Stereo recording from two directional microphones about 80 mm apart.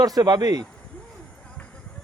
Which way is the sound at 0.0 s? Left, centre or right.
Right.